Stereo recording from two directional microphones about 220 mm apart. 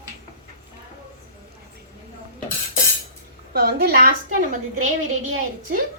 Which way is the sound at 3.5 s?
45° right (ahead or behind).